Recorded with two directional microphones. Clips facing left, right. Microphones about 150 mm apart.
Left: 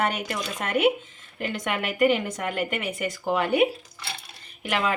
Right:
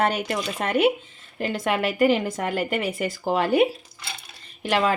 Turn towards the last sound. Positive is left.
turn(degrees=-35)  # may be behind; listen again after turning